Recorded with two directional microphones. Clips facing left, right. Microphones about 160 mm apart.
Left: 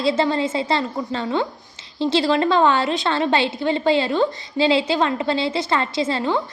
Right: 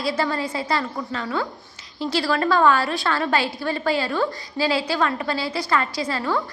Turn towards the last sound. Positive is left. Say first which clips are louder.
# left 3 dB
turn(degrees=25)  # may be behind; listen again after turning